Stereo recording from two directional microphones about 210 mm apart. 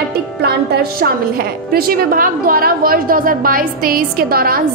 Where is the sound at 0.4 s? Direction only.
50° right (ahead or behind).